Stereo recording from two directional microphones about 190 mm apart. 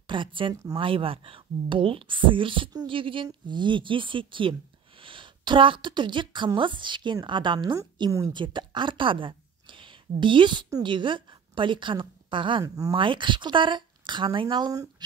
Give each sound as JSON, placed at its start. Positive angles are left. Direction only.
{"t": 0.0, "sound": "a woman's voice", "side_deg": -25}